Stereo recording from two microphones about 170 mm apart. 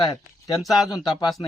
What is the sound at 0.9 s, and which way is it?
Speech, 25° left (ahead or behind).